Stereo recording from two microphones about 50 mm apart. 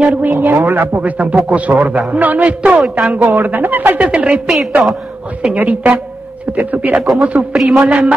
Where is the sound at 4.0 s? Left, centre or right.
Right.